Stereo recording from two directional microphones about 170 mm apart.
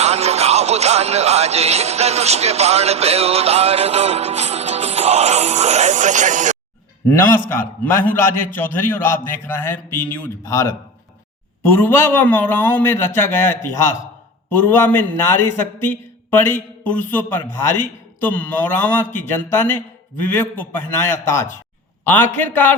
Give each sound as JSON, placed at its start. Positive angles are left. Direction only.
{"t": 0.0, "sound": "music", "side_deg": -40}
{"t": 7.1, "sound": "a man's voice", "side_deg": 10}